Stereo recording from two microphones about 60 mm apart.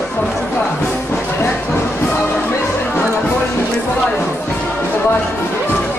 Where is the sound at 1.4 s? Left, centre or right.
Left.